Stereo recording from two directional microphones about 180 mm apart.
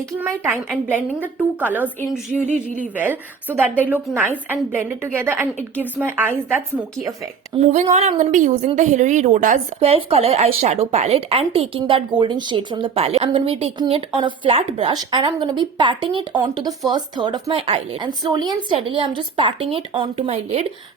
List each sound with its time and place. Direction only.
0.5 s a woman's voice: 10° right (ahead or behind)
2.5 s speech: 45° right (ahead or behind)
2.9 s a woman's voice: 10° right (ahead or behind)
7.7 s speech: 40° right (ahead or behind)